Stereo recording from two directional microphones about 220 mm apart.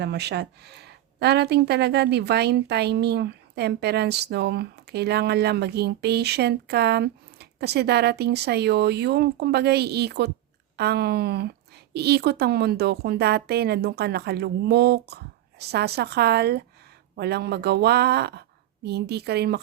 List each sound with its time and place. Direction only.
0.0 s speech: 50° right (ahead or behind)